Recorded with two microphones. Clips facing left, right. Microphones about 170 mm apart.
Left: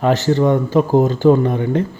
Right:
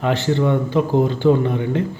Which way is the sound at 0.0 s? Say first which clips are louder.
Left 4 dB; 40° left (ahead or behind).